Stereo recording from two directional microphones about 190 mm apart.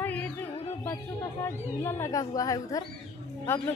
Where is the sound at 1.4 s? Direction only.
10° left (ahead or behind).